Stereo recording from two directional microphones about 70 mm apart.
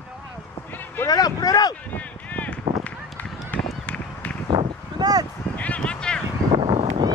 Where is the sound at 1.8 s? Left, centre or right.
Left.